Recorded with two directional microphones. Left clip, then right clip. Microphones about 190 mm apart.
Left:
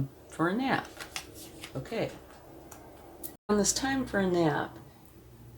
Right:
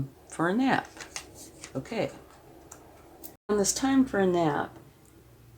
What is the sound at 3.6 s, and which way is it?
Speech, 45° right (ahead or behind).